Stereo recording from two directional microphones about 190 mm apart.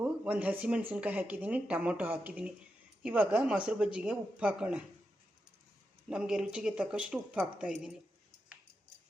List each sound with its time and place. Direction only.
0.0 s speech: 10° right (ahead or behind)
6.1 s speech: 5° right (ahead or behind)